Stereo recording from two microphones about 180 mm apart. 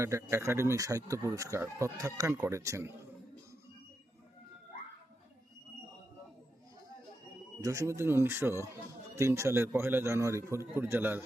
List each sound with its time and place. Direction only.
0.0 s a man's voice: 15° right (ahead or behind)
7.6 s a man's voice: 15° right (ahead or behind)